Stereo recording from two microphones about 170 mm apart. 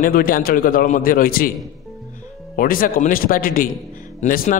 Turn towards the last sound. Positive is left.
turn(degrees=55)  # may be behind; listen again after turning